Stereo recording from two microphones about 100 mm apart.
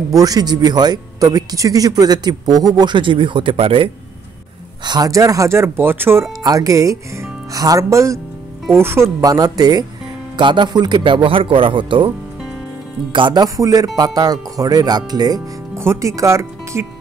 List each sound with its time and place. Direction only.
0.1 s speech: 40° right (ahead or behind); by 3.9 s 65° right (ahead or behind)
4.8 s speech: 40° right (ahead or behind); by 6.2 s 20° right (ahead or behind)
6.4 s speech: 35° right (ahead or behind)
9.2 s speech: 40° right (ahead or behind); by 12.1 s 55° right (ahead or behind)
13.1 s speech: 50° right (ahead or behind)
15.8 s speech: 30° right (ahead or behind)